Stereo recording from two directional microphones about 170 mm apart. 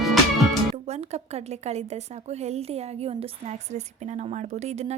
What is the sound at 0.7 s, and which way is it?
A woman's voice, 40° right (ahead or behind).